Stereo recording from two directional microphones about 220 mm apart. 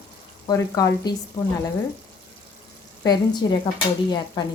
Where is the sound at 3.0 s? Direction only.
20° left (ahead or behind).